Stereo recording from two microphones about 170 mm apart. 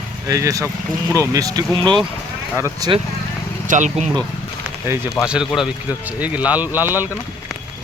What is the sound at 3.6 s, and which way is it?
Speech, 45° right (ahead or behind).